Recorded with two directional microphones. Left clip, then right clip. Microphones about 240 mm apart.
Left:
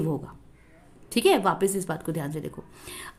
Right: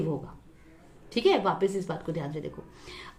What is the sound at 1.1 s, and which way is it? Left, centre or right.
A woman's voice, left.